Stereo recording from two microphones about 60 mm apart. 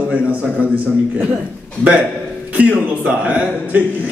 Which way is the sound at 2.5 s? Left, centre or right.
Right.